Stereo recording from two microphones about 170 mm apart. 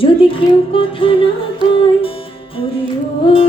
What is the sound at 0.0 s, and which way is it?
Speech, 30° left (ahead or behind).